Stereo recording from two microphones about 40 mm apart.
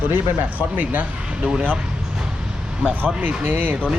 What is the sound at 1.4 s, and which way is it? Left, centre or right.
Speech, right.